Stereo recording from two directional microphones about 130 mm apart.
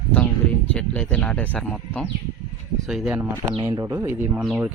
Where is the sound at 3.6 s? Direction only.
20° right (ahead or behind).